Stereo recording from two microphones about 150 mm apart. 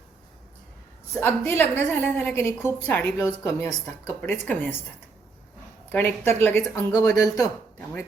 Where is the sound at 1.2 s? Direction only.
15° left (ahead or behind).